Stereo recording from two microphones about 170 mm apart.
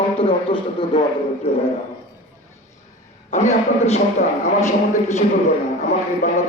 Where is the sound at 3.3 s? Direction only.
40° left (ahead or behind).